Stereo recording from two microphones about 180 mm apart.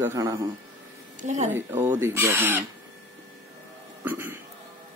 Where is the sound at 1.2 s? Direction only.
40° right (ahead or behind).